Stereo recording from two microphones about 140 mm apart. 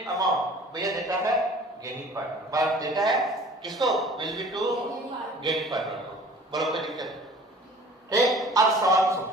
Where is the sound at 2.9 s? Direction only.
Centre (ahead or behind).